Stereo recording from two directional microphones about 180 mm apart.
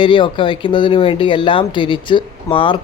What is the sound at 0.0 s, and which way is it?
Speech, 25° left (ahead or behind).